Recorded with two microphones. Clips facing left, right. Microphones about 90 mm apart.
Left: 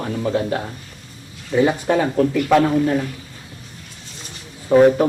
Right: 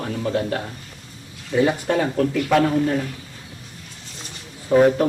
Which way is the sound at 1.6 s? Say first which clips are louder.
Left 2 dB; 25° left (ahead or behind).